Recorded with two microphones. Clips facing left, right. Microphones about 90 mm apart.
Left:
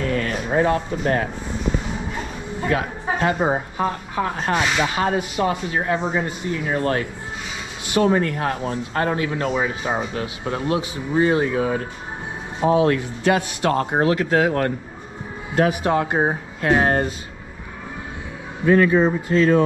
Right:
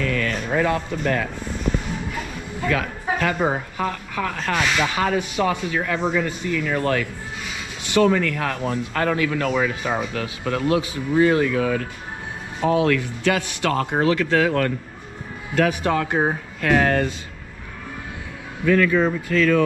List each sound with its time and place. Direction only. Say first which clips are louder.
0.0 s a sound: left 1 dB; 35° left (ahead or behind)
1.0 s speech: left 1 dB; 35° left (ahead or behind)
2.6 s a man's voice: left 1 dB; 30° left (ahead or behind)
18.7 s speech: left 2 dB; 30° left (ahead or behind)